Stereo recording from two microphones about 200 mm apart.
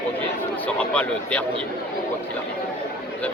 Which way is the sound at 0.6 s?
5° left (ahead or behind).